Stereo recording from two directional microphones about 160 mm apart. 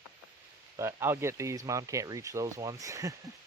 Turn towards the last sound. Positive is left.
turn(degrees=-20)  # may be behind; listen again after turning